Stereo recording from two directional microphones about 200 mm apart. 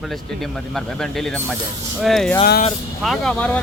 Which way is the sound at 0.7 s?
Centre (ahead or behind).